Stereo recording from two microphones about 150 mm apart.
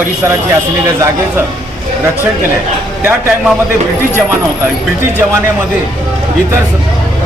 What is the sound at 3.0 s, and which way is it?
Speech, 15° right (ahead or behind).